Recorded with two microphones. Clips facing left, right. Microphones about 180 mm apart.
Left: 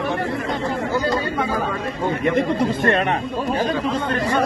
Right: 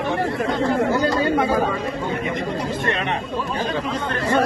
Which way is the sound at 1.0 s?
70° right (ahead or behind).